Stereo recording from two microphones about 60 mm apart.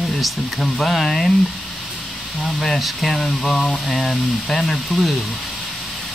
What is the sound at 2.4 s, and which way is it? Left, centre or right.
Speech, centre.